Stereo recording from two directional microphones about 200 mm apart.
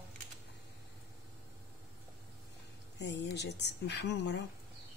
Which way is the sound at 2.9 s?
60° left (ahead or behind).